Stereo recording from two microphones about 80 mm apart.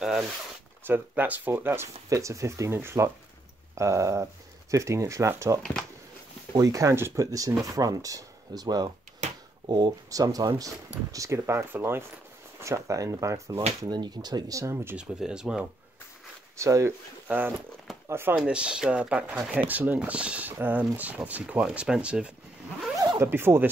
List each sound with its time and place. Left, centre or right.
0.8 s speech: right
2.0 s speech: right
5.6 s speech: centre
6.5 s speech: right
9.7 s speech: right
10.0 s speech: right
13.6 s speech: right
14.5 s speech: right
15.0 s speech: centre
16.5 s speech: right
17.3 s speech: right
18.4 s speech: centre
23.1 s speech: right